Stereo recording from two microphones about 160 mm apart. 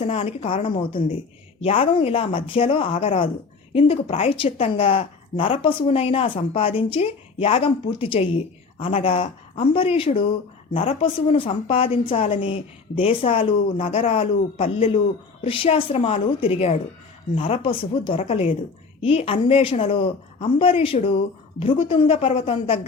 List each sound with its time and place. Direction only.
0.0 s a woman's voice: 40° left (ahead or behind)